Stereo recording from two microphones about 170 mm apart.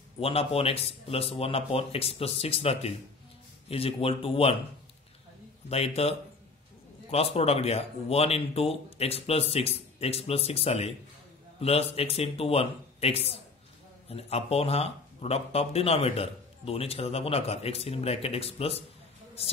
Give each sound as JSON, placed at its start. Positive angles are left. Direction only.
{"t": 0.2, "sound": "speech", "side_deg": 35}
{"t": 5.7, "sound": "speech", "side_deg": 35}